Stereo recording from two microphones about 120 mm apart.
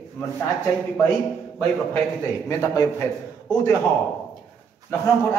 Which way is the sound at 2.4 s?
30° left (ahead or behind).